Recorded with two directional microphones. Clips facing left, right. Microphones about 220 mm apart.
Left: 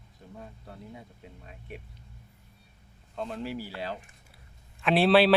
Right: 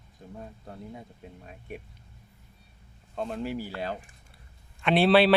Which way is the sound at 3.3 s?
50° right (ahead or behind).